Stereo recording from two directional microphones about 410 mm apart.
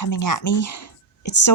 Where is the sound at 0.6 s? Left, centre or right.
Left.